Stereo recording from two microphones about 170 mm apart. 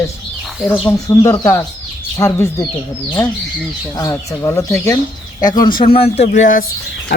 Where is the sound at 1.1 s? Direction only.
20° left (ahead or behind).